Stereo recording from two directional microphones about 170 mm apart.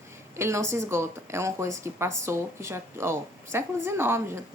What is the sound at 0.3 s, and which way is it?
A woman's voice, 15° right (ahead or behind).